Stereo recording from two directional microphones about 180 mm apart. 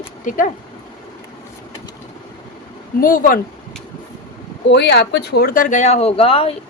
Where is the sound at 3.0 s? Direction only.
50° left (ahead or behind).